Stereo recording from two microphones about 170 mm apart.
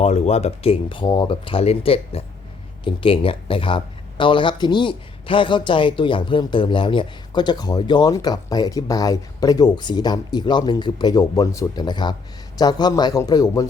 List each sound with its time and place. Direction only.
0.0 s speech: 40° left (ahead or behind); by 13.7 s 20° left (ahead or behind)